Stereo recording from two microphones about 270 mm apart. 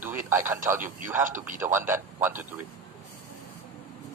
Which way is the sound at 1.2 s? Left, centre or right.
Right.